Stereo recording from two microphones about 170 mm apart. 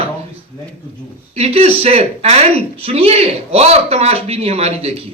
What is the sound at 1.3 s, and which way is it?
Speech, 35° right (ahead or behind).